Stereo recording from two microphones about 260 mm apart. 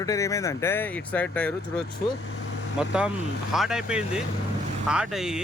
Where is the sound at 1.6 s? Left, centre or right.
Left.